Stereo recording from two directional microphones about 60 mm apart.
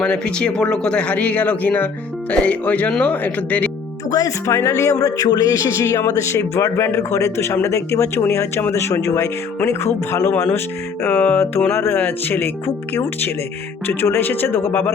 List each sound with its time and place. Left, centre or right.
0.0 s speech: centre
4.1 s speech: left
5.7 s speech: left
11.1 s speech: left
11.7 s speech: left